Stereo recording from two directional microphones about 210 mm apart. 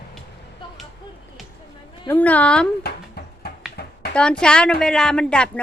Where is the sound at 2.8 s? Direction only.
50° left (ahead or behind).